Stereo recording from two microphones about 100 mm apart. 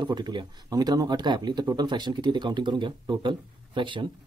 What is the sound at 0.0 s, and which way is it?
Speech, 45° right (ahead or behind).